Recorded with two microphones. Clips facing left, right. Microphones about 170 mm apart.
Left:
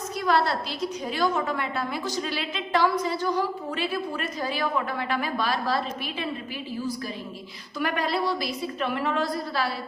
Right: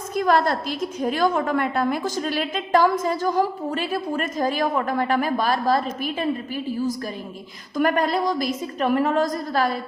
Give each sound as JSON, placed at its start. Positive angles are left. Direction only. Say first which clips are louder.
{"t": 0.1, "sound": "a woman's voice", "louder": "right 5 dB", "side_deg": -50}
{"t": 7.8, "sound": "a woman's voice", "louder": "right 6 dB", "side_deg": -45}